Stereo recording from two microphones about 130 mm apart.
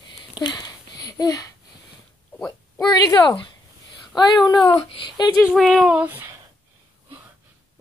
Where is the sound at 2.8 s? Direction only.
25° left (ahead or behind).